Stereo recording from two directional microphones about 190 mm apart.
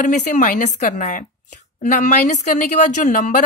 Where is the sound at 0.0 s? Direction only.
40° left (ahead or behind).